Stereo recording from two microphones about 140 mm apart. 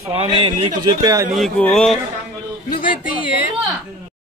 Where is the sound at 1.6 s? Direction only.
5° left (ahead or behind).